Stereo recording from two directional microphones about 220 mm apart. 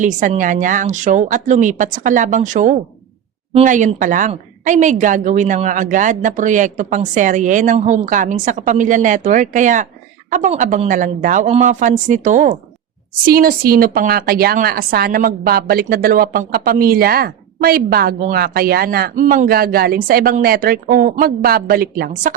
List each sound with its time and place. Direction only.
0.0 s a woman's voice: 35° right (ahead or behind)